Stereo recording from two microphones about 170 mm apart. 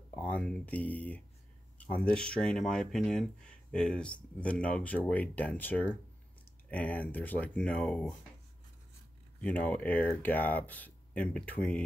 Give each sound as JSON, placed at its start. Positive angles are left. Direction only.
{"t": 0.1, "sound": "speech", "side_deg": 10}
{"t": 9.4, "sound": "speech", "side_deg": 10}